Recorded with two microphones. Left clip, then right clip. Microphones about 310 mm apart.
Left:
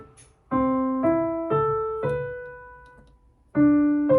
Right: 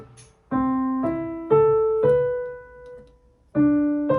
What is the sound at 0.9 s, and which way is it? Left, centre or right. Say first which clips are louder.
Keyboard: left 4 dB; centre.